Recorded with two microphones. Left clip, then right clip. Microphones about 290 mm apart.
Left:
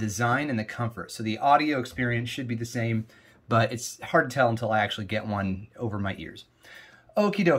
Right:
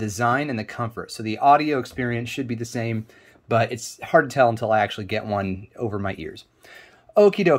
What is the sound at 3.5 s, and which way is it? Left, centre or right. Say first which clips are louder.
Speech: right 3 dB; centre.